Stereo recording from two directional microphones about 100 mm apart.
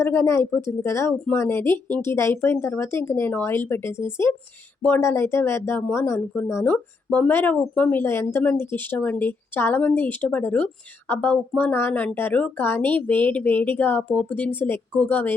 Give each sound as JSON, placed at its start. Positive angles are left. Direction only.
{"t": 0.0, "sound": "speech", "side_deg": 25}